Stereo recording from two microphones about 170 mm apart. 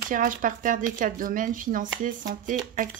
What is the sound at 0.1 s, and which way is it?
Speech, 50° right (ahead or behind).